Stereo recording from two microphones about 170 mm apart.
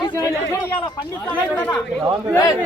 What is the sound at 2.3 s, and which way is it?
Speech, 20° left (ahead or behind).